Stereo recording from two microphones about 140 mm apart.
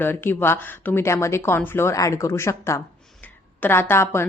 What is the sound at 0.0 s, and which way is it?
A woman's voice, 15° left (ahead or behind).